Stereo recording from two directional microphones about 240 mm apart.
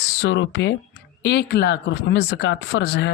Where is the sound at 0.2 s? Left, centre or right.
Left.